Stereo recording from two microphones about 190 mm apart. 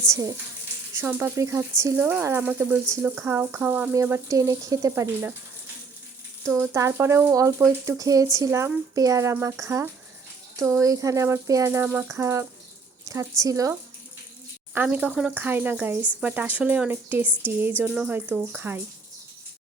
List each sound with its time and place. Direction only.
0.1 s speech: 20° right (ahead or behind)
6.4 s speech: 15° right (ahead or behind)